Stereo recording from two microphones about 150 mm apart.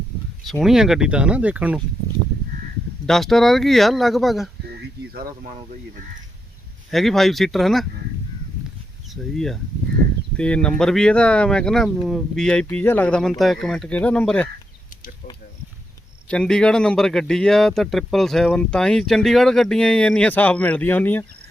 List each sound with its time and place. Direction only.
0.6 s speech: 5° right (ahead or behind)
3.1 s speech: centre (ahead or behind)
5.1 s speech: 80° right
6.9 s speech: centre (ahead or behind)
9.3 s speech: centre (ahead or behind)
16.3 s speech: 5° left (ahead or behind)